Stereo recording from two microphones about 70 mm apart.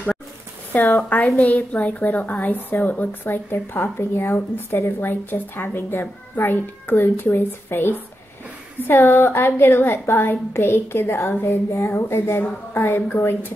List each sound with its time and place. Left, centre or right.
0.7 s a woman's voice: left
1.0 s a woman's voice: left
3.3 s a woman's voice: left